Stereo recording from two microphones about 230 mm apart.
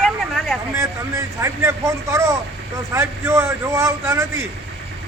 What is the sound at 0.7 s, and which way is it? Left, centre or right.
Speech, centre.